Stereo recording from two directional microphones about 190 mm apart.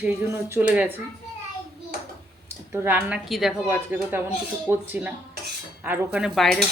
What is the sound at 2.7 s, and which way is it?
Speech, 10° right (ahead or behind).